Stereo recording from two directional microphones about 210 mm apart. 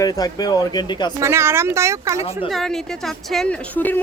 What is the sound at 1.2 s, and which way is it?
Speech, 10° right (ahead or behind).